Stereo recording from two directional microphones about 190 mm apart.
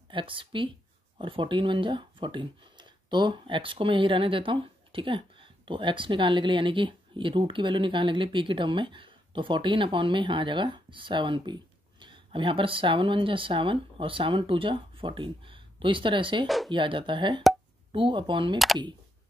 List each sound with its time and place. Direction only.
0.1 s speech: 25° right (ahead or behind)
16.4 s speech: centre (ahead or behind)
16.7 s speech: 25° right (ahead or behind)